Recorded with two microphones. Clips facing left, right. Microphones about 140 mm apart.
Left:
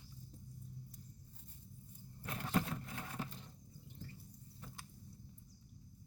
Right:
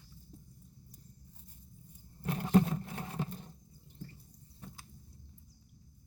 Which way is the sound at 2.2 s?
30° right (ahead or behind).